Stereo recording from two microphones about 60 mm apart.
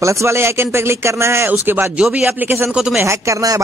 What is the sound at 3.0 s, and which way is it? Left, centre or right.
Speech, right.